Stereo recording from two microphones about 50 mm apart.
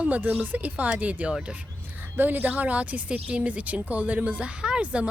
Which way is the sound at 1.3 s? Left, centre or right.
Centre.